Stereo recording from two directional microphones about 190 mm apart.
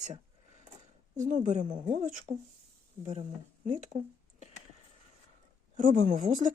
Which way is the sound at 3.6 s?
40° right (ahead or behind).